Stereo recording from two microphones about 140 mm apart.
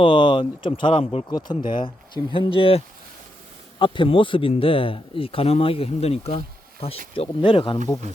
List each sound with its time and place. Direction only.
0.0 s speech: 35° left (ahead or behind)